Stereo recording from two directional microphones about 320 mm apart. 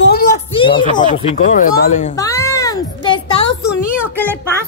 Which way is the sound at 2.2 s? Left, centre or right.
Centre.